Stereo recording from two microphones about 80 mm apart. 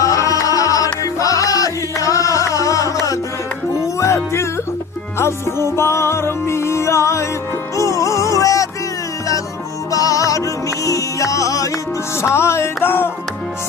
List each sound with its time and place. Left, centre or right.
0.0 s music: left
9.9 s music: left